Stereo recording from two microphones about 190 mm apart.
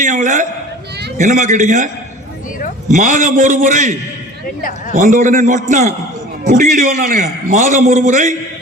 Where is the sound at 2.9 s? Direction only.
40° right (ahead or behind).